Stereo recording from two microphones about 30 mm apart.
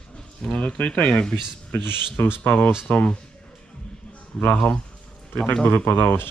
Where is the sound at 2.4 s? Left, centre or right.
Left.